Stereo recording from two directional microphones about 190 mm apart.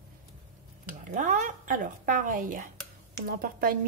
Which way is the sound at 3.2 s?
50° right (ahead or behind).